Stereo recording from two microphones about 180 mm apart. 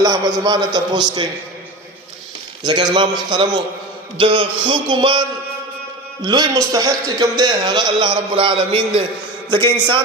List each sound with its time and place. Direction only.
0.0 s a man's voice: 20° right (ahead or behind)
2.6 s a man's voice: 25° right (ahead or behind)
6.2 s a man's voice: 25° right (ahead or behind)